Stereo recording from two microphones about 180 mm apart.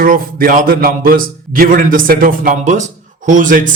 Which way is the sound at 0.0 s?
50° right (ahead or behind).